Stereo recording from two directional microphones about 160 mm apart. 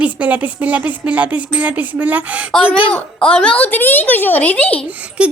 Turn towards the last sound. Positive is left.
turn(degrees=-10)  # may be behind; listen again after turning